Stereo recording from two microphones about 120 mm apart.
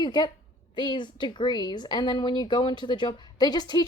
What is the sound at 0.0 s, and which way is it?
A woman's voice, 35° left (ahead or behind).